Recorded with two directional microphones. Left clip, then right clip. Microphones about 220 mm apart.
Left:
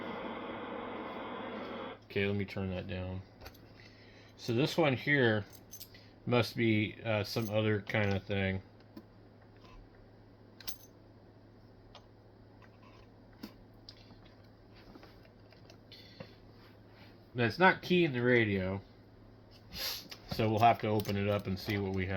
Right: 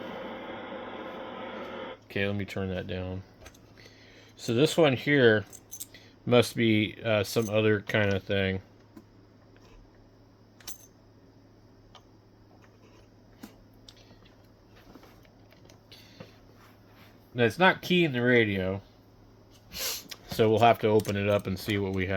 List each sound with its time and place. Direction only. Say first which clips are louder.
2.0 s speech: right 3 dB; 50° right (ahead or behind)
4.4 s speech: right 8 dB; 55° right (ahead or behind)
17.3 s speech: right 4 dB; 50° right (ahead or behind)